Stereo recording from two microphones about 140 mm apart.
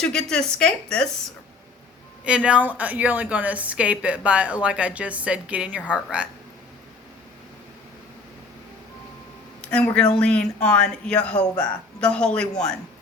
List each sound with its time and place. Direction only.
0.0 s a woman's voice: 5° left (ahead or behind)
2.2 s a woman's voice: 10° right (ahead or behind)
9.6 s speech: 5° left (ahead or behind)